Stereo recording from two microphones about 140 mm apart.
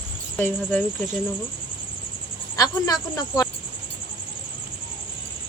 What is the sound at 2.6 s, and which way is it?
Speech, 25° left (ahead or behind).